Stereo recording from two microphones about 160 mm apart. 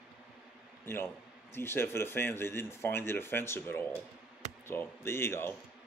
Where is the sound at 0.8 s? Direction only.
15° left (ahead or behind).